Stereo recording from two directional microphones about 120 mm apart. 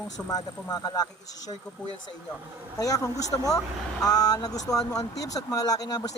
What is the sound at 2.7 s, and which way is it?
Speech, 30° left (ahead or behind).